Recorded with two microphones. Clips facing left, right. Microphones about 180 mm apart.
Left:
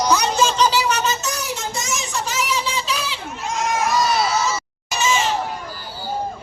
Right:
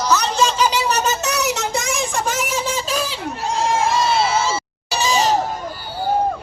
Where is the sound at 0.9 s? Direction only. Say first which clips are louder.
Right 2 dB; 45° right (ahead or behind).